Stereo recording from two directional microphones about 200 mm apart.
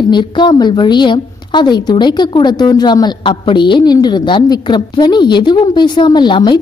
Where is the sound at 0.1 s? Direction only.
25° left (ahead or behind).